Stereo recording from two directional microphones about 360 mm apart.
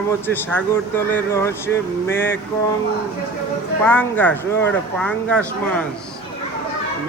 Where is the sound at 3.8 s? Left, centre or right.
Centre.